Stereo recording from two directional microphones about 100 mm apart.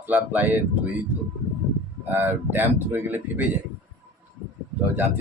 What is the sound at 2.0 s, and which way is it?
Speech, 20° right (ahead or behind).